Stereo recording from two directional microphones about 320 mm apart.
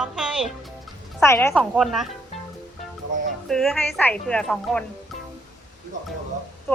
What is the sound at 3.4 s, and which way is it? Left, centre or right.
A woman's voice, centre.